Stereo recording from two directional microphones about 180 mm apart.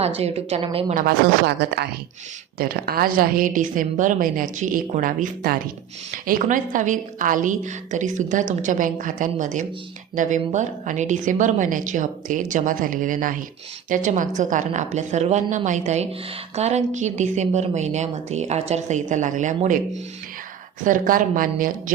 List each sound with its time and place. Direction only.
0.0 s a woman's voice: 35° right (ahead or behind)
0.9 s speech: 60° right (ahead or behind)
2.6 s a woman's voice: 55° right (ahead or behind)
20.8 s a woman's voice: 50° right (ahead or behind)